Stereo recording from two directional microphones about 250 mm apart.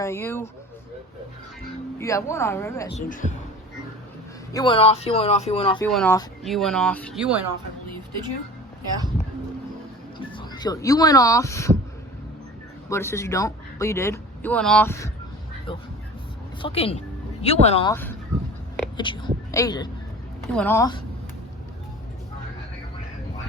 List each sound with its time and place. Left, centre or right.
0.0 s speech: centre
2.0 s speech: centre
3.1 s speech: left
4.5 s speech: centre
5.8 s speech: centre
10.2 s speech: centre
12.9 s speech: centre
16.6 s a woman's voice: left
17.9 s a woman's voice: centre